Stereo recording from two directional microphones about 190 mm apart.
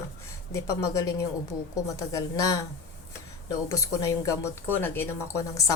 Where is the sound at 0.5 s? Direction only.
15° left (ahead or behind).